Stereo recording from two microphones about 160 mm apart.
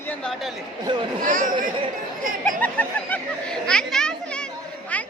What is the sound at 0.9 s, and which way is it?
Speech, 30° right (ahead or behind).